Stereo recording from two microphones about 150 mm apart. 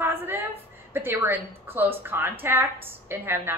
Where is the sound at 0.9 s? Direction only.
15° right (ahead or behind).